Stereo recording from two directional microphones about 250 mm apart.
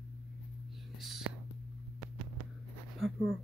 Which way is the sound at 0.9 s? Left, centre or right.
Centre.